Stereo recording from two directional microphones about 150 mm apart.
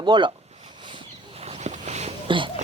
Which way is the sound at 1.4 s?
45° right (ahead or behind).